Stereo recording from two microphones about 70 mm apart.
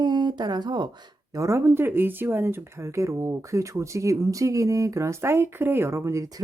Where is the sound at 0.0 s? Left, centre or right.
Right.